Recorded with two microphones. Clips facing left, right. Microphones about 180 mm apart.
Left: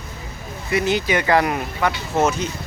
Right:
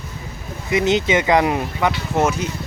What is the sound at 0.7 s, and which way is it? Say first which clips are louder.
Speech: right 3 dB; 20° right (ahead or behind).